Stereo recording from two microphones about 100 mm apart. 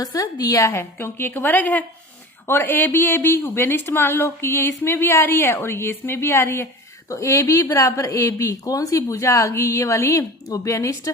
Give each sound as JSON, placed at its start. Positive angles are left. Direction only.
{"t": 0.0, "sound": "speech", "side_deg": 40}